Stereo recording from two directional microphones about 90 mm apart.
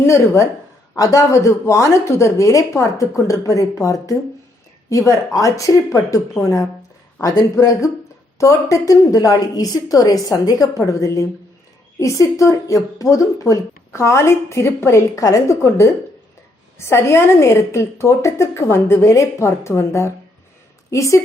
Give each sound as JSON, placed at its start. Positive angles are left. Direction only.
{"t": 0.0, "sound": "speech", "side_deg": 30}